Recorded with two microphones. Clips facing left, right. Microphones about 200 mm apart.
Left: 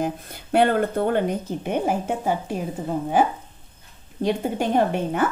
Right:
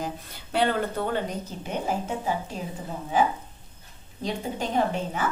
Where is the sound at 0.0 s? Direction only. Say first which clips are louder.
Left 7 dB; 55° left (ahead or behind).